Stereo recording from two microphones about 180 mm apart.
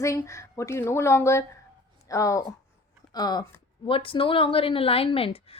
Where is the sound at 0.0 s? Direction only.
15° left (ahead or behind).